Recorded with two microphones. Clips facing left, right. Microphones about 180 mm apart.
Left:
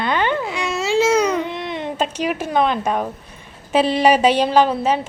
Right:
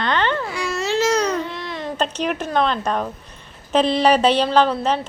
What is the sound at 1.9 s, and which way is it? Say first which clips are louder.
Speech: even; 10° left (ahead or behind).